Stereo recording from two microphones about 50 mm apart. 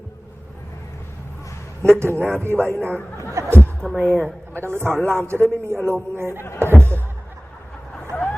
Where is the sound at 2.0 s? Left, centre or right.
Right.